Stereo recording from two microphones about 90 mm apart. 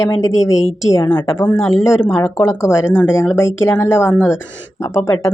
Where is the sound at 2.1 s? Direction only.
30° left (ahead or behind).